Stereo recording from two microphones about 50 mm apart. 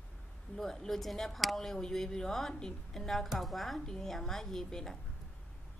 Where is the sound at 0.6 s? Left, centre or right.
Centre.